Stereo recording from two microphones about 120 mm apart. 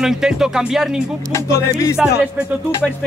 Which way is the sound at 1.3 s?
25° left (ahead or behind).